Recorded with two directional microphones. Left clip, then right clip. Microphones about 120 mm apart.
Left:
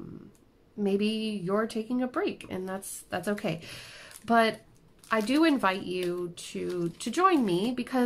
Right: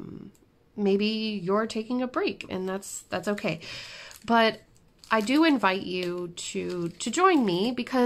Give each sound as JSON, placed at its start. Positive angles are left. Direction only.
{"t": 0.7, "sound": "a woman's voice", "side_deg": -35}